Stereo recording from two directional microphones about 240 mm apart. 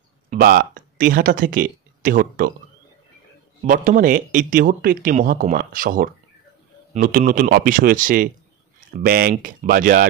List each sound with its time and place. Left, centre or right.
0.3 s speech: right
3.6 s speech: right